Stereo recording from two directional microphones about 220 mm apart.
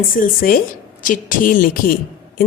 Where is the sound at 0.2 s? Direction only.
40° left (ahead or behind).